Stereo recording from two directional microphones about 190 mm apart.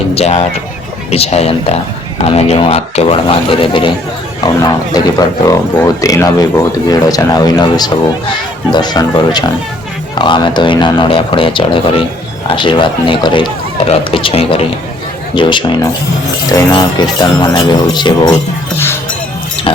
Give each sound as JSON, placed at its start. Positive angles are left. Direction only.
{"t": 0.1, "sound": "speech", "side_deg": 35}
{"t": 19.7, "sound": "speech", "side_deg": 30}